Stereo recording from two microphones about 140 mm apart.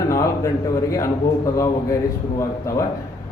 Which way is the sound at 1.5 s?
20° left (ahead or behind).